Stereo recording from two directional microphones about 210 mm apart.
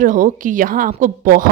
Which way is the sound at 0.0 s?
40° right (ahead or behind).